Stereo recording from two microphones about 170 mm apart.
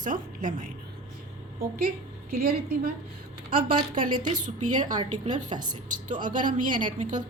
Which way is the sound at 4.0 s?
50° right (ahead or behind).